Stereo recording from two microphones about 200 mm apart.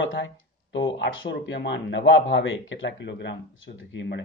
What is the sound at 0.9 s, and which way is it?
Speech, 65° left (ahead or behind).